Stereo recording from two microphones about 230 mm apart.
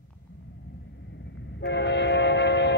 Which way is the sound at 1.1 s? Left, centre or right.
Left.